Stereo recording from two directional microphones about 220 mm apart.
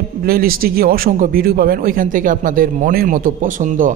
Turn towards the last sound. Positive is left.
turn(degrees=-35)  # may be behind; listen again after turning